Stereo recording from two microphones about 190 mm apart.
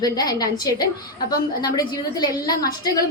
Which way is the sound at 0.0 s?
20° left (ahead or behind).